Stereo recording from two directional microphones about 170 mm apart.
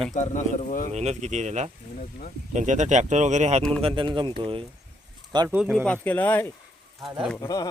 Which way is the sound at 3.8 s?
30° right (ahead or behind).